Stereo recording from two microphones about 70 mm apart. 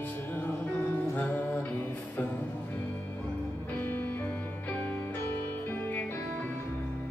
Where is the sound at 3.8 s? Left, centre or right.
Left.